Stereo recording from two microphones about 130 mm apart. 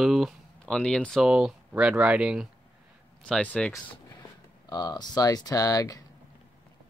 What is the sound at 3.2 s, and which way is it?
Speech, 5° left (ahead or behind).